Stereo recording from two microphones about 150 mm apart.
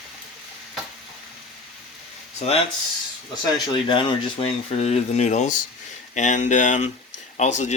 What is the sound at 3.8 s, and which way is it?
Speech, 35° left (ahead or behind).